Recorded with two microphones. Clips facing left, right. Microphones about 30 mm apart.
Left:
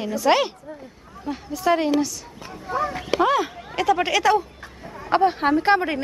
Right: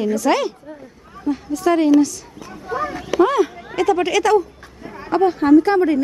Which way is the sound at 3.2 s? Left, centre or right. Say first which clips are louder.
Right 5 dB; centre.